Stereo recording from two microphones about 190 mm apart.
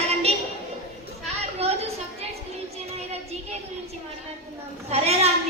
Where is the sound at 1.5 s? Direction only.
35° right (ahead or behind).